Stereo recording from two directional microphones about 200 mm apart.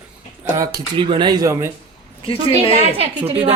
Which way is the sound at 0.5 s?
20° right (ahead or behind).